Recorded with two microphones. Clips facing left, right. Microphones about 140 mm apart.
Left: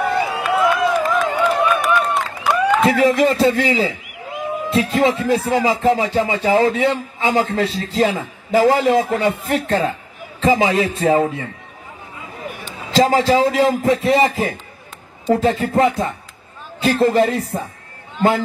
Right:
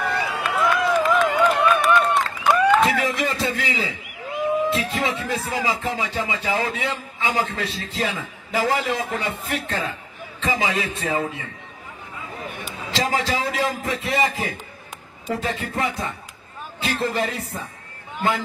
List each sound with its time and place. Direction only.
0.4 s a sound: 10° left (ahead or behind)
3.0 s speech: 35° left (ahead or behind)
12.9 s speech: 35° left (ahead or behind)